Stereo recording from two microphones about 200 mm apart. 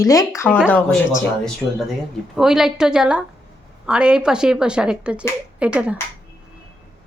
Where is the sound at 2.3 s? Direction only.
Centre (ahead or behind).